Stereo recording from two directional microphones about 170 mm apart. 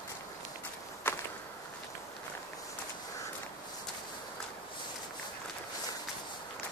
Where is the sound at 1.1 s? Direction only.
10° left (ahead or behind).